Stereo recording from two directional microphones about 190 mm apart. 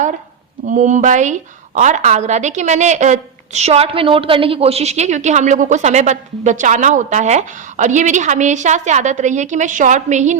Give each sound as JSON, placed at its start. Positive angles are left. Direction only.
{"t": 0.7, "sound": "a woman's voice", "side_deg": -40}